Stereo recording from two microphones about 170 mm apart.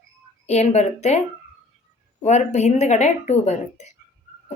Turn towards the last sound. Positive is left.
turn(degrees=40)  # may be behind; listen again after turning